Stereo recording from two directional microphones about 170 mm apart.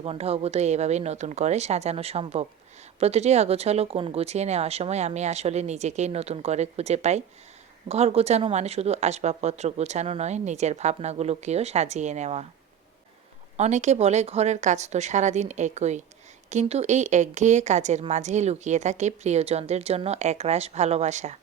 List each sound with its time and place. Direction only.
0.0 s speech: 35° right (ahead or behind)
13.6 s speech: 45° right (ahead or behind)